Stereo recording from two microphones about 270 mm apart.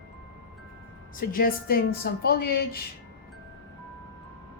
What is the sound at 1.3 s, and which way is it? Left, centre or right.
A woman's voice, left.